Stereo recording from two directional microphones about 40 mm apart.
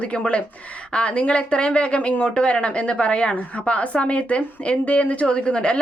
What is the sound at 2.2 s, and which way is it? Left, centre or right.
A woman's voice, left.